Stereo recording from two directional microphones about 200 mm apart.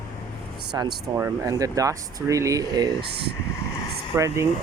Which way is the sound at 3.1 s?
55° right (ahead or behind).